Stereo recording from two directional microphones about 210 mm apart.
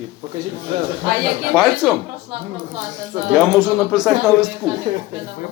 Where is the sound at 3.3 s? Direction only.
Centre (ahead or behind).